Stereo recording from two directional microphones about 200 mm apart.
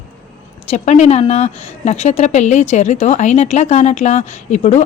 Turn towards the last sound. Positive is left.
turn(degrees=35)  # may be behind; listen again after turning